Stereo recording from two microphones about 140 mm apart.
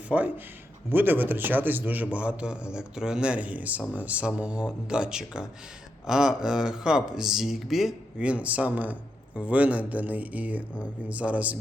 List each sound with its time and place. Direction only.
0.1 s speech: 10° right (ahead or behind)